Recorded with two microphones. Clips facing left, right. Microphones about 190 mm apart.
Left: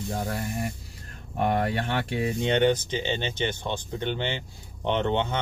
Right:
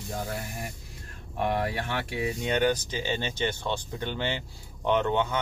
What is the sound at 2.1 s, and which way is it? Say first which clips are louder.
Speech: left 3 dB; 30° left (ahead or behind).